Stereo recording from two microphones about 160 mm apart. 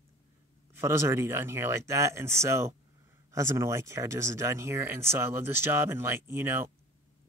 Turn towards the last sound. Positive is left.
turn(degrees=-15)  # may be behind; listen again after turning